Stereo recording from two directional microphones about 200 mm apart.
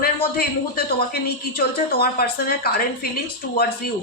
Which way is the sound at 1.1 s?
50° left (ahead or behind).